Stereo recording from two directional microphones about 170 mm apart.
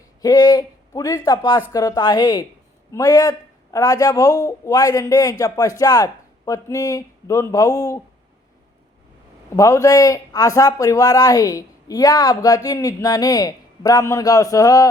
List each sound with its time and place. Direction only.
0.2 s a man's voice: 20° left (ahead or behind)
9.6 s speech: 20° left (ahead or behind)